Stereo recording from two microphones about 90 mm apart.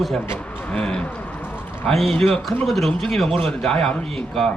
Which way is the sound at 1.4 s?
20° left (ahead or behind).